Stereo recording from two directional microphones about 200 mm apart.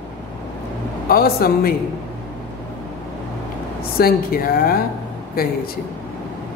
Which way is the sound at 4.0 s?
45° left (ahead or behind).